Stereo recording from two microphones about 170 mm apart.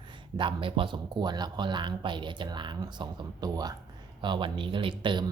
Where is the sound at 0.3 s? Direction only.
30° right (ahead or behind).